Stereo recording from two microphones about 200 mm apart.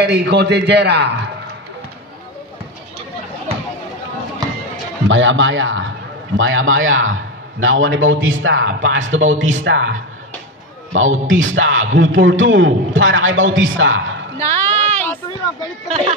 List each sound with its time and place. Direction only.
0.0 s a man's voice: 55° right (ahead or behind)
5.0 s a man's voice: 70° right (ahead or behind)
14.4 s a sound: 15° left (ahead or behind)